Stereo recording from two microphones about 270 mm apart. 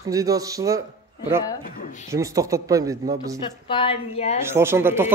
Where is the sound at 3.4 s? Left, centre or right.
Centre.